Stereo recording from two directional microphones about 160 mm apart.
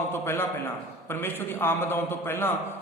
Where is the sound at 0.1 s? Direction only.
15° left (ahead or behind).